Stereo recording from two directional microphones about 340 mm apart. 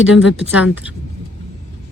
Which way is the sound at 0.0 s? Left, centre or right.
Left.